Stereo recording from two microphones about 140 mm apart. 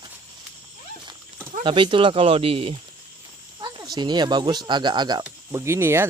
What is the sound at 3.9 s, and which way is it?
Speech, 30° right (ahead or behind).